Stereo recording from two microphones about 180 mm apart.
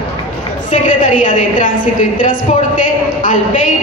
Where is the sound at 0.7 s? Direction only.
45° left (ahead or behind).